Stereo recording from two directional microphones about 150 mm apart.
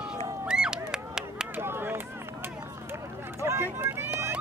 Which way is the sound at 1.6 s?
15° right (ahead or behind).